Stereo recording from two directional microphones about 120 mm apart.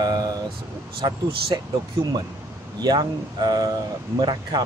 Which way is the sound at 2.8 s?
35° right (ahead or behind).